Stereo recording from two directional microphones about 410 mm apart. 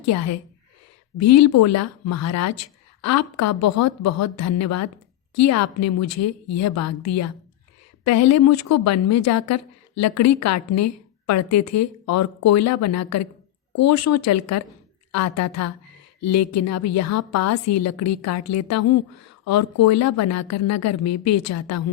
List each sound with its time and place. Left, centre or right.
0.0 s a woman's voice: left